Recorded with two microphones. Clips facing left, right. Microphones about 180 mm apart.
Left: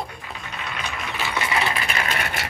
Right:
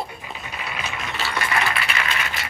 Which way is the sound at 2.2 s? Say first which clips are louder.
Left 2 dB; 55° left (ahead or behind).